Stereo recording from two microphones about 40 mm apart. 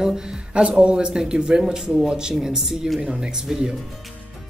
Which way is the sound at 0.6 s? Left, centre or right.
Right.